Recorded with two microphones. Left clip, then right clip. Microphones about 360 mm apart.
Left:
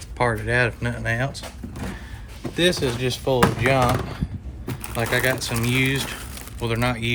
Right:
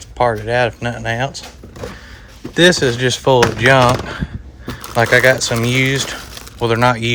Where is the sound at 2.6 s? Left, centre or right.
Right.